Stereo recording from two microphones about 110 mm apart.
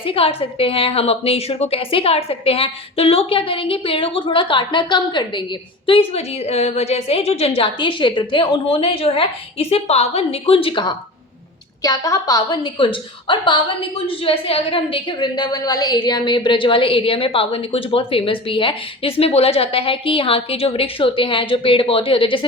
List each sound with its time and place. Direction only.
0.0 s a woman's voice: 55° left (ahead or behind)
11.8 s a woman's voice: 30° left (ahead or behind); by 22.4 s 50° left (ahead or behind)